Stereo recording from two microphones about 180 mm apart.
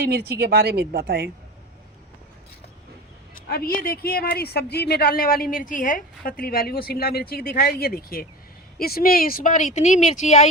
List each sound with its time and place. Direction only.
0.0 s speech: 60° right (ahead or behind)
3.3 s speech: 55° left (ahead or behind)